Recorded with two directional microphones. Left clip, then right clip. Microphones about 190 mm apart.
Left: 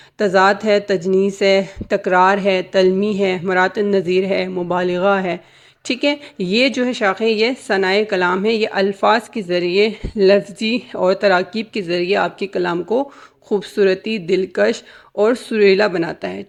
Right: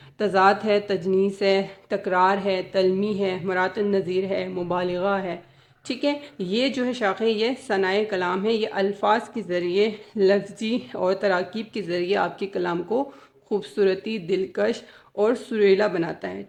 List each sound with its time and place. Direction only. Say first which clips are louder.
0.2 s a woman's voice: left 5 dB; 20° left (ahead or behind)